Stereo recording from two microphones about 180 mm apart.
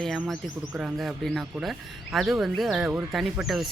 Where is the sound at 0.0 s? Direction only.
Centre (ahead or behind).